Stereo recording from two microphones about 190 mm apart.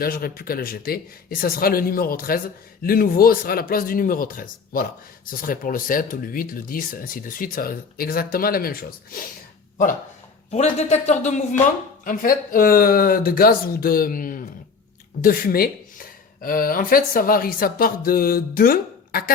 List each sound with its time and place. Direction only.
0.0 s speech: 50° left (ahead or behind)
10.5 s speech: 35° left (ahead or behind)